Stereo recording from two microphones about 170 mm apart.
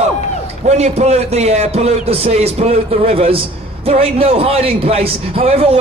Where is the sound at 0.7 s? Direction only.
40° right (ahead or behind).